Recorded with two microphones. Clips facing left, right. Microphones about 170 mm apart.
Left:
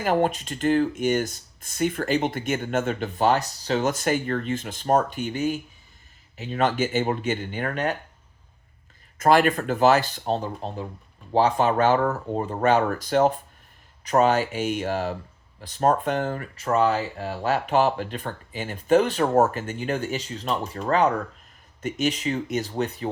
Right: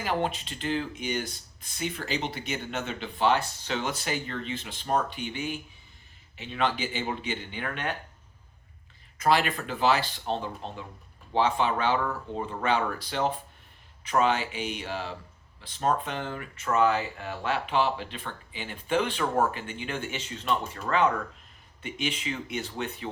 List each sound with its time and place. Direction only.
0.0 s speech: 45° left (ahead or behind)
9.1 s speech: 50° left (ahead or behind)